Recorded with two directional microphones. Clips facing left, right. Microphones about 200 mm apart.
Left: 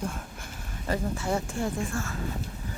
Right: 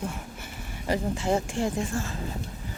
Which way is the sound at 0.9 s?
15° right (ahead or behind).